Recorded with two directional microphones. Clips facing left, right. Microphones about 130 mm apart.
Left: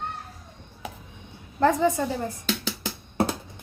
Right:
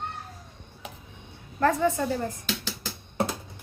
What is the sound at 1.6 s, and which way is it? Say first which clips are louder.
Speech: left 2 dB; 15° left (ahead or behind).